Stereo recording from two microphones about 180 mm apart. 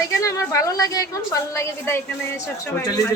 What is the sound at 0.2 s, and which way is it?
A woman's voice, 15° left (ahead or behind).